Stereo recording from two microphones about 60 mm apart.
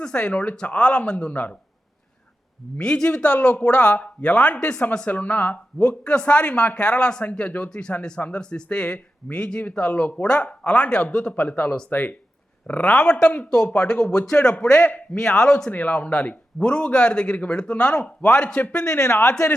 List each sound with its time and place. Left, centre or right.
0.0 s speech: centre
2.8 s a man's voice: centre
15.7 s a man's voice: left
18.9 s speech: left